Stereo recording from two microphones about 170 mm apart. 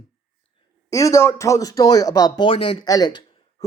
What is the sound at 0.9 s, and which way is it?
Speech, 20° left (ahead or behind).